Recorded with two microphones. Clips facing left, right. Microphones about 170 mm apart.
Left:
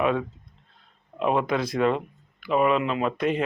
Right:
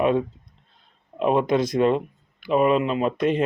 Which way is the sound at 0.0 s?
25° right (ahead or behind).